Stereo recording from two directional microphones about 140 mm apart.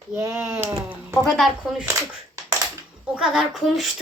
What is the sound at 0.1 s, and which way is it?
Speech, 20° right (ahead or behind).